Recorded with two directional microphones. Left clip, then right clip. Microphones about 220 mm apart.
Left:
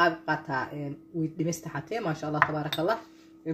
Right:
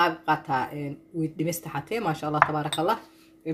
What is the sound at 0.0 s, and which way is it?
Speech, 40° right (ahead or behind).